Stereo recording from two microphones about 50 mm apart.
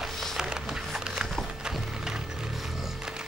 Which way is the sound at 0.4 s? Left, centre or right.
Centre.